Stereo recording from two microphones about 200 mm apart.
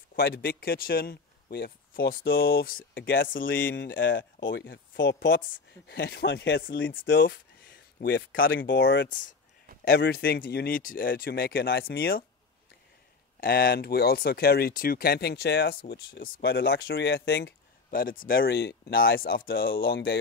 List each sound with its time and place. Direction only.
0.1 s speech: 50° left (ahead or behind)
3.7 s speech: 45° left (ahead or behind)
4.0 s speech: 65° left (ahead or behind)
8.0 s speech: 55° left (ahead or behind)
13.4 s speech: 45° left (ahead or behind)